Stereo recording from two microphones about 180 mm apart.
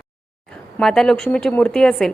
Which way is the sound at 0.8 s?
Centre (ahead or behind).